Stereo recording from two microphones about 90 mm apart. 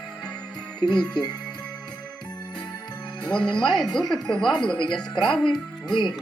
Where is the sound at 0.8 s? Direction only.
55° left (ahead or behind).